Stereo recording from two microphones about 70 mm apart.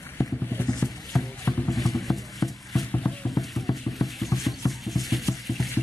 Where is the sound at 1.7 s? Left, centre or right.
Centre.